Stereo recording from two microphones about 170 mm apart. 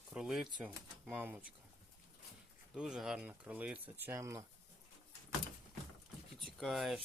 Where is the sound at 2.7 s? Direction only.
5° right (ahead or behind).